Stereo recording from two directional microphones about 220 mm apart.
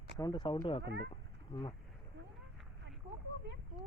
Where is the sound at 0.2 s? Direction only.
15° left (ahead or behind).